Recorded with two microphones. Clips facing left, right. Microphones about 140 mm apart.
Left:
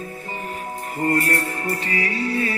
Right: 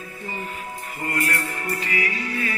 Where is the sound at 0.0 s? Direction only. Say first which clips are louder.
Left 2 dB; 40° left (ahead or behind).